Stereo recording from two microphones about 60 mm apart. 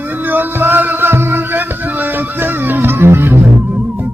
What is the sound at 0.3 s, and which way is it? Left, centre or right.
Music, right.